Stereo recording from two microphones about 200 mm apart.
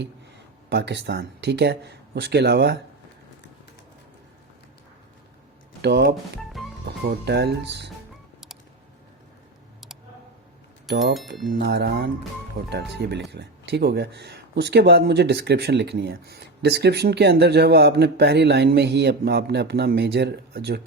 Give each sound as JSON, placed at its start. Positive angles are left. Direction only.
{"t": 0.7, "sound": "speech", "side_deg": -60}
{"t": 5.8, "sound": "speech", "side_deg": -55}
{"t": 11.0, "sound": "speech", "side_deg": 0}
{"t": 11.5, "sound": "speech", "side_deg": -55}